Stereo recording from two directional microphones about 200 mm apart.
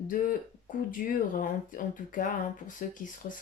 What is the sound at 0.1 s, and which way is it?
Speech, 45° left (ahead or behind).